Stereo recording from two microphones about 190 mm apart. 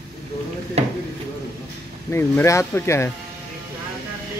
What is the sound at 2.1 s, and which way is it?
Speech, 15° left (ahead or behind).